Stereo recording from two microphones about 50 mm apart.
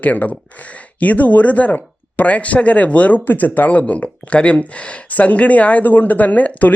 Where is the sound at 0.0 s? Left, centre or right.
Left.